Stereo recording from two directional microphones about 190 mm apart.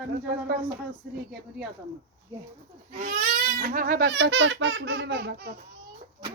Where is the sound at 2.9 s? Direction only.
45° right (ahead or behind).